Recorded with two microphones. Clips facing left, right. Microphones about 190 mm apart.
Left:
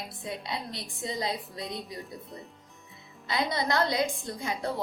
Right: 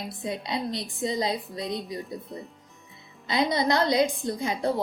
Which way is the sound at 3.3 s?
20° right (ahead or behind).